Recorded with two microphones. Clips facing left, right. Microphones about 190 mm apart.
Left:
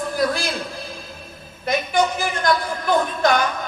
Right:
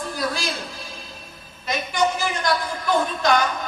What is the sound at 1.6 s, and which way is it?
A woman's voice, 55° left (ahead or behind).